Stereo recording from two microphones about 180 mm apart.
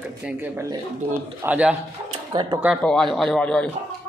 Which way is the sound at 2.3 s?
25° right (ahead or behind).